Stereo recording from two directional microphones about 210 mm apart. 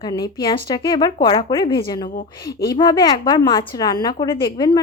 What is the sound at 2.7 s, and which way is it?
A woman's voice, 20° left (ahead or behind).